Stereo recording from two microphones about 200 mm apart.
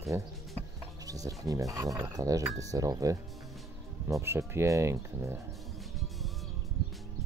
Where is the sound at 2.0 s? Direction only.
15° right (ahead or behind).